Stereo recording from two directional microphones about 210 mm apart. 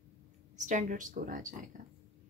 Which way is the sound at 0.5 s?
35° right (ahead or behind).